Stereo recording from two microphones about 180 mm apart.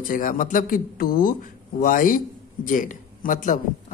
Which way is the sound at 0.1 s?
50° left (ahead or behind).